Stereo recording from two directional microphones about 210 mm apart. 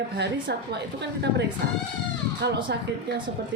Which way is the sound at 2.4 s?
55° right (ahead or behind).